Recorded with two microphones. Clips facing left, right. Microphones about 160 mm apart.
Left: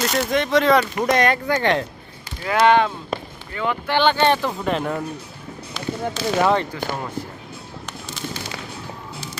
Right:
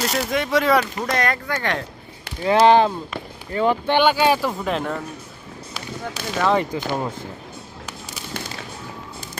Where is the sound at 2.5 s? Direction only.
30° right (ahead or behind).